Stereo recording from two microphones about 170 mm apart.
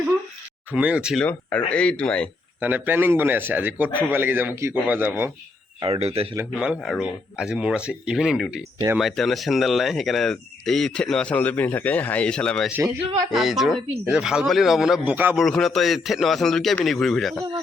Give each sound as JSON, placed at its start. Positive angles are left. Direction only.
{"t": 0.7, "sound": "speech", "side_deg": -5}
{"t": 1.2, "sound": "speech", "side_deg": 10}
{"t": 2.6, "sound": "speech", "side_deg": -10}
{"t": 5.8, "sound": "speech", "side_deg": -35}
{"t": 6.3, "sound": "speech", "side_deg": -10}
{"t": 15.4, "sound": "speech", "side_deg": 0}